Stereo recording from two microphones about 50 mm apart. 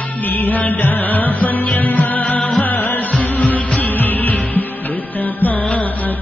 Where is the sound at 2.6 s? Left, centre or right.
Left.